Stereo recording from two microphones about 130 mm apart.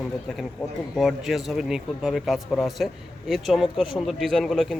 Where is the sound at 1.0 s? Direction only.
Centre (ahead or behind).